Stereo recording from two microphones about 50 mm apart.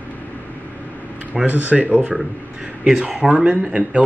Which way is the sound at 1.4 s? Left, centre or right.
Right.